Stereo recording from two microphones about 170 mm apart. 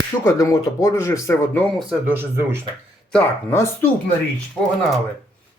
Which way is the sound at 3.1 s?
15° left (ahead or behind).